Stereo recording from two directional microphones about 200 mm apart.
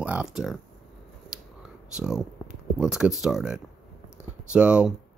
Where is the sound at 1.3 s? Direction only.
5° right (ahead or behind).